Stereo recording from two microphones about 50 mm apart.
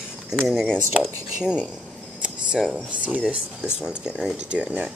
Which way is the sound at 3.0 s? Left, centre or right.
Right.